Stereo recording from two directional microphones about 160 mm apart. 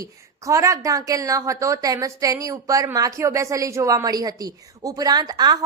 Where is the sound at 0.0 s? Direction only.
20° right (ahead or behind).